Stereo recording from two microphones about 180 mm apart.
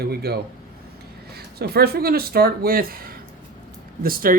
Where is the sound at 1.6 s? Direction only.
60° right (ahead or behind).